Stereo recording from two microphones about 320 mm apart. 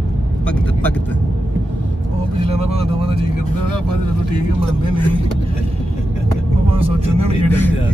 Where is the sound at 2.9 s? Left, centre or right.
Centre.